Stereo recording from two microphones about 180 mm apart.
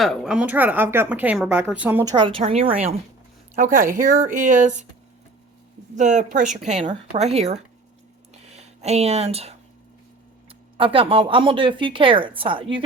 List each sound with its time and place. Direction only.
0.0 s a woman's voice: centre (ahead or behind)
2.0 s speech: 25° right (ahead or behind)
3.5 s speech: 45° right (ahead or behind)
6.0 s speech: 40° right (ahead or behind)
8.3 s a sound: 35° right (ahead or behind)
10.8 s speech: 30° right (ahead or behind)